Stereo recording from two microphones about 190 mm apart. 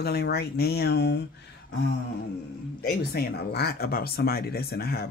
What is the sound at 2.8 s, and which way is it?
Speech, 55° left (ahead or behind).